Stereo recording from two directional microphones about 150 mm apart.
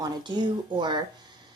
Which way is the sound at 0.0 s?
30° right (ahead or behind).